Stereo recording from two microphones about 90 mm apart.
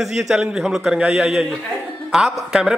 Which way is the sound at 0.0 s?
5° right (ahead or behind).